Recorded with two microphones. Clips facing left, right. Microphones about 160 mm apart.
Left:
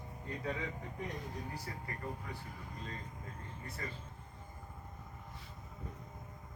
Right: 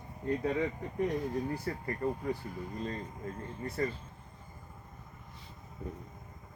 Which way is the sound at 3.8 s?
45° right (ahead or behind).